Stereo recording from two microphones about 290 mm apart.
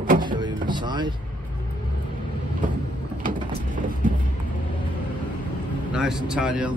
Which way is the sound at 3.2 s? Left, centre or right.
Right.